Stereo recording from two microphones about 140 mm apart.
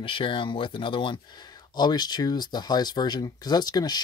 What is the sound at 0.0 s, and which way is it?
Speech, 40° left (ahead or behind).